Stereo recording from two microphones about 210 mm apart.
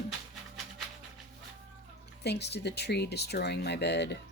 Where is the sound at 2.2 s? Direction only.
55° left (ahead or behind).